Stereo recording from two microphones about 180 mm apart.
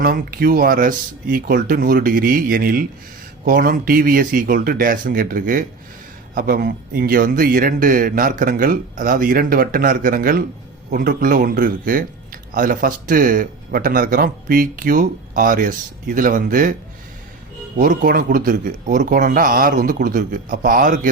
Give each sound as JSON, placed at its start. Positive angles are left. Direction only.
{"t": 0.0, "sound": "speech", "side_deg": -55}
{"t": 17.7, "sound": "speech", "side_deg": -50}